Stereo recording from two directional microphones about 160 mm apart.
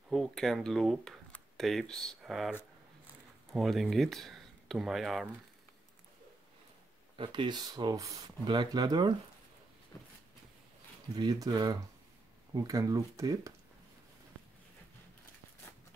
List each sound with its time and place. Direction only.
0.1 s speech: centre (ahead or behind)
3.5 s speech: centre (ahead or behind)
7.2 s speech: 30° right (ahead or behind)
11.1 s speech: 25° right (ahead or behind)